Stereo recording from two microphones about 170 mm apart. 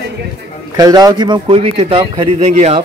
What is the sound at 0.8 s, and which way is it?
Speech, 20° right (ahead or behind).